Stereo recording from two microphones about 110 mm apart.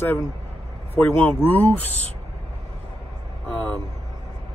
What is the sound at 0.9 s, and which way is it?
Speech, 15° left (ahead or behind).